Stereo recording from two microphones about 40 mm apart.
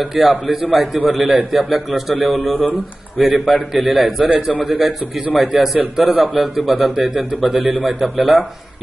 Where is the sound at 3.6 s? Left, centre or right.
Centre.